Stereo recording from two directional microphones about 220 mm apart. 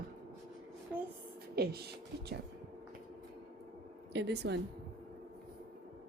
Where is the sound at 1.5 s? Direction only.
45° right (ahead or behind).